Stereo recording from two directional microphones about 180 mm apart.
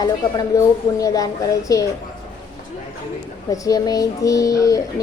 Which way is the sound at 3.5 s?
20° left (ahead or behind).